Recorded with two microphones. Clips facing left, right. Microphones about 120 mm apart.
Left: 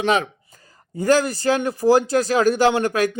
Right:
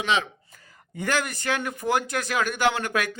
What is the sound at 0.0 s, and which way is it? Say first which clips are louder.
Speech: left 5 dB; 45° left (ahead or behind).